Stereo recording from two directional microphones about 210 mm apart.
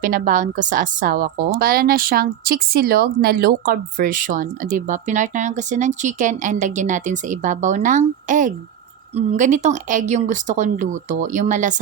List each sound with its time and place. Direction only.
0.0 s a woman's voice: 40° right (ahead or behind)